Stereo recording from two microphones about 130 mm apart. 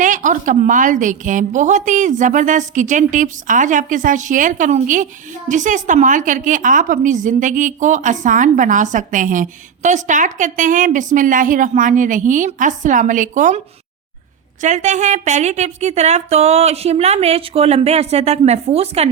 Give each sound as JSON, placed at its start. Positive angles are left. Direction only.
{"t": 0.0, "sound": "a woman's voice", "side_deg": -80}
{"t": 14.6, "sound": "a woman's voice", "side_deg": -65}